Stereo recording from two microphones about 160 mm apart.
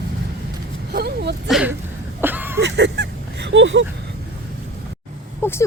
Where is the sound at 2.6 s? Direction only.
90° right.